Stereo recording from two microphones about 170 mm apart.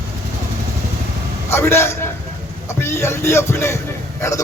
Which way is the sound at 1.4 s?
15° left (ahead or behind).